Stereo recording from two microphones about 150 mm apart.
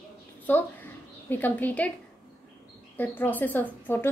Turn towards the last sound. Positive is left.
turn(degrees=10)  # may be behind; listen again after turning